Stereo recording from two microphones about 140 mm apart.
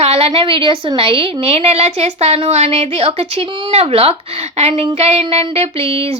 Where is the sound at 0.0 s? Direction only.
45° right (ahead or behind).